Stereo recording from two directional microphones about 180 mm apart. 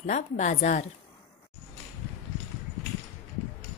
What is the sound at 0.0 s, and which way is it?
Speech, 40° left (ahead or behind).